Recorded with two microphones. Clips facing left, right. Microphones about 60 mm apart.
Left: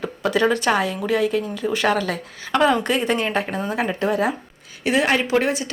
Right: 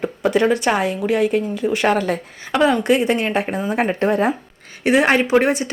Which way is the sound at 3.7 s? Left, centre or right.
Right.